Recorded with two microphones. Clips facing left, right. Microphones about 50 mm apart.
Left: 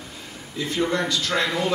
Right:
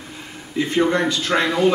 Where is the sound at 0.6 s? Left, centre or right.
Right.